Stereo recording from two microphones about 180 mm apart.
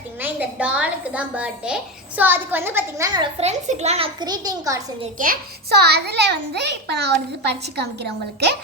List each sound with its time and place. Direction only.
0.2 s a child's voice: 10° right (ahead or behind)
3.4 s a child's voice: 35° right (ahead or behind); by 4.8 s 20° right (ahead or behind)
5.1 s a child's voice: 50° right (ahead or behind); by 7.9 s 65° right (ahead or behind)